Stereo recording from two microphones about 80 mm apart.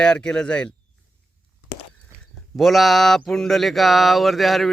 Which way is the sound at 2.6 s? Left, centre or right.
Centre.